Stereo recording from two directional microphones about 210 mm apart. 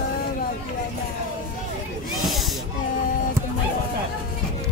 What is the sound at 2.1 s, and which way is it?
Snake, centre (ahead or behind).